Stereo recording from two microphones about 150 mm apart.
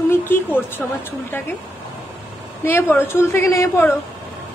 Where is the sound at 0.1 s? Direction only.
15° left (ahead or behind).